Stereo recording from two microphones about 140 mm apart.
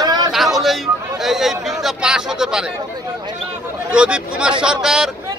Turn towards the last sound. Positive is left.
turn(degrees=-5)  # may be behind; listen again after turning